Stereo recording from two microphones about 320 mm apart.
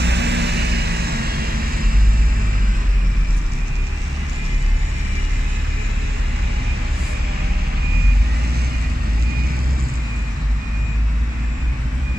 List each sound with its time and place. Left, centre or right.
0.0 s vehicle: right